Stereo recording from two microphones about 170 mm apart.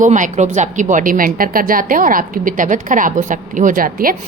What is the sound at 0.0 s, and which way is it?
A woman's voice, 45° right (ahead or behind).